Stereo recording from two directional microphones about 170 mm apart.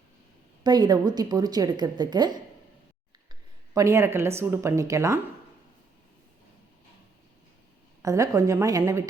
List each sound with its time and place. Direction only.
0.6 s a woman's voice: 25° right (ahead or behind)
3.8 s speech: 15° right (ahead or behind)
8.0 s speech: 20° right (ahead or behind)